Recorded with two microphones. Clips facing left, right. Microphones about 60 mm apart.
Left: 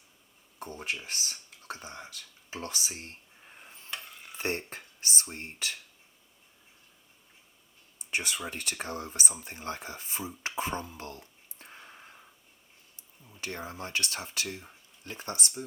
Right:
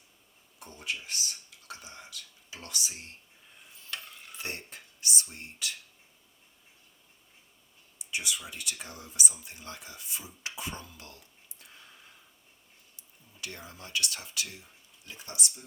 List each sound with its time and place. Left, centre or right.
0.6 s speech: left
3.9 s stir: centre
4.4 s speech: left
7.9 s speech: left